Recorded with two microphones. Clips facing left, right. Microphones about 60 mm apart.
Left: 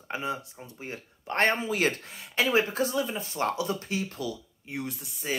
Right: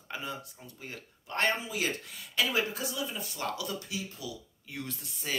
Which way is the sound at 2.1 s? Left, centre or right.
Left.